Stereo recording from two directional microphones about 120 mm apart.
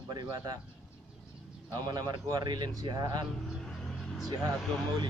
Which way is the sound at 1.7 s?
35° right (ahead or behind).